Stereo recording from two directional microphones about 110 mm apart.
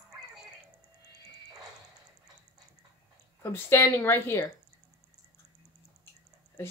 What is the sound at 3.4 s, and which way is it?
A woman's voice, 25° left (ahead or behind).